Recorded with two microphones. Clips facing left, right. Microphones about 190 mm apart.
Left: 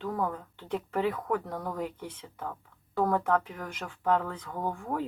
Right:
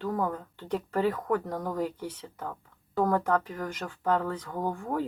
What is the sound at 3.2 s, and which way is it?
Speech, 40° right (ahead or behind).